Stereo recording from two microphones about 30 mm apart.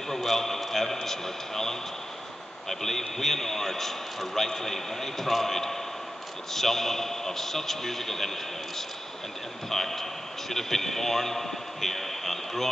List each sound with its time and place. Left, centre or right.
0.1 s a man's voice: centre
9.7 s a man's voice: centre